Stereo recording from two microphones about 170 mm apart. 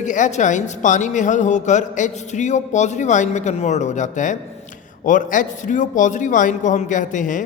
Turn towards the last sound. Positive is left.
turn(degrees=50)  # may be behind; listen again after turning